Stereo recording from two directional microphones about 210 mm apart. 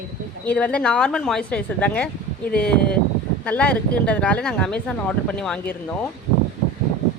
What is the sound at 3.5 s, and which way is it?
Speech, 5° left (ahead or behind).